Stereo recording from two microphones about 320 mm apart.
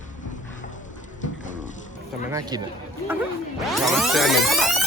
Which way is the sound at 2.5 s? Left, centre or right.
Centre.